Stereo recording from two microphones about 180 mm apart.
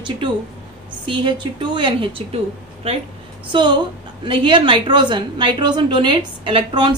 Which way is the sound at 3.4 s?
25° right (ahead or behind).